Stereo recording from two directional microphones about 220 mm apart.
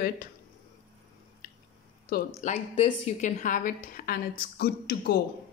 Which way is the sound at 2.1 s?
35° left (ahead or behind).